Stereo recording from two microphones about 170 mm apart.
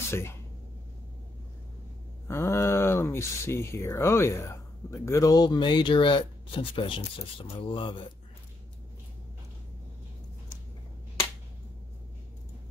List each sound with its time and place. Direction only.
0.1 s speech: 15° left (ahead or behind)
2.2 s speech: 15° left (ahead or behind)